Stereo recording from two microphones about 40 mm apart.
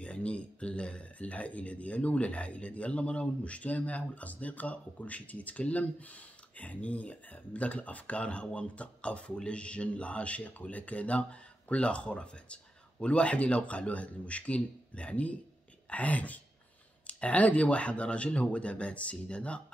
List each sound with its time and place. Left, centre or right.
0.0 s speech: left